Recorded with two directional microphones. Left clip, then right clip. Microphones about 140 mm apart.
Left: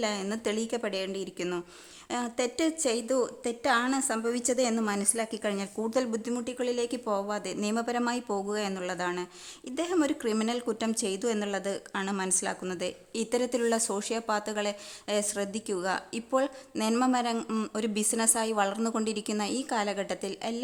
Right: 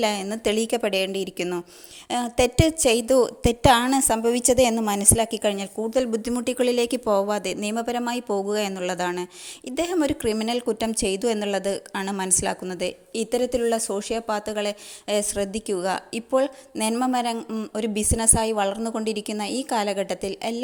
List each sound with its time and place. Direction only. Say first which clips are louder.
0.0 s a woman's voice: right 7 dB; 30° right (ahead or behind)
6.4 s a woman's voice: right 10 dB; 40° right (ahead or behind); by 17.3 s 20° right (ahead or behind)
17.3 s speech: right 2 dB; 5° right (ahead or behind)
17.7 s a woman's voice: right 6 dB; 20° right (ahead or behind)